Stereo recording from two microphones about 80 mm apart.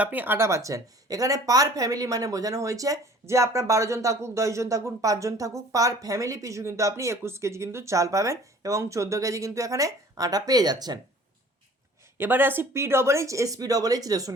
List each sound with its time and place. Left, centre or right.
0.0 s speech: right
12.1 s speech: right